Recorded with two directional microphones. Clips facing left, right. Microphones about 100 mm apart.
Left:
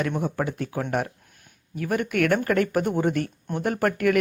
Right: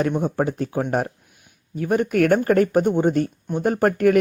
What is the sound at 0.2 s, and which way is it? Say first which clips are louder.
Speech: right 5 dB; 30° right (ahead or behind).